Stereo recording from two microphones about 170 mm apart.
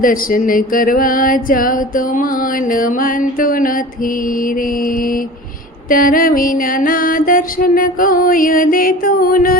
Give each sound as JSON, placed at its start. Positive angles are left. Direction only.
{"t": 0.0, "sound": "music", "side_deg": 55}
{"t": 2.7, "sound": "music", "side_deg": 55}
{"t": 5.9, "sound": "music", "side_deg": 55}